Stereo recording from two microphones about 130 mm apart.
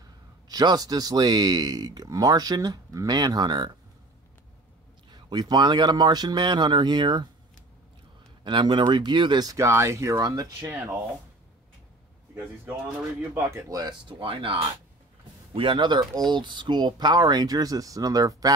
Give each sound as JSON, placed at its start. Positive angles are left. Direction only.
{"t": 0.5, "sound": "speech", "side_deg": -30}
{"t": 5.1, "sound": "speech", "side_deg": -30}
{"t": 8.5, "sound": "speech", "side_deg": -35}
{"t": 13.3, "sound": "speech", "side_deg": -25}
{"t": 14.0, "sound": "speech", "side_deg": -40}